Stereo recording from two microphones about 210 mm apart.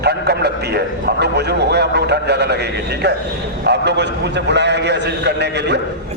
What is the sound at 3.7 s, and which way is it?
A man's voice, 55° right (ahead or behind).